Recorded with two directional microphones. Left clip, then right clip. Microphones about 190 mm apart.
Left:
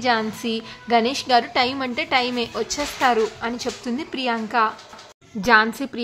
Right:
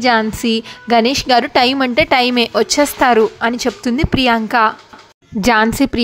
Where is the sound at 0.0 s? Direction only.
35° right (ahead or behind).